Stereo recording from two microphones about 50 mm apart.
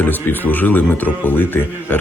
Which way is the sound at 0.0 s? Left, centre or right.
Left.